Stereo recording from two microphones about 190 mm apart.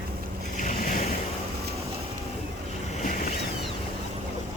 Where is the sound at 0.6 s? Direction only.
45° left (ahead or behind).